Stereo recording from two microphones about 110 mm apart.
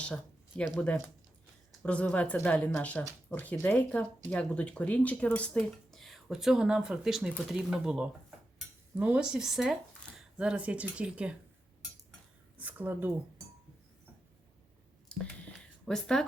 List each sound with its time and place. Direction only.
0.0 s a sound: 10° left (ahead or behind)
1.8 s speech: 10° left (ahead or behind); by 8.1 s 10° right (ahead or behind)
8.5 s dishes: 10° right (ahead or behind)
10.3 s speech: 10° right (ahead or behind)
12.5 s speech: 15° right (ahead or behind)
15.1 s whispering: 5° left (ahead or behind)
15.9 s speech: 5° left (ahead or behind)